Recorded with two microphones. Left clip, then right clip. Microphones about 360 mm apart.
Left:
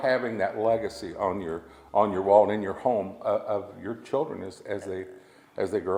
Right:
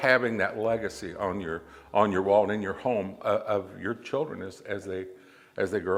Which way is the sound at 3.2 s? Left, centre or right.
Right.